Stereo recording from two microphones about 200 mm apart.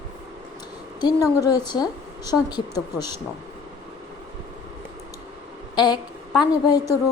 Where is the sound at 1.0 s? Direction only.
20° left (ahead or behind).